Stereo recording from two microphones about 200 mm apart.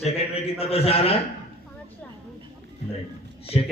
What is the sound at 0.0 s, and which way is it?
A man's voice, 30° left (ahead or behind).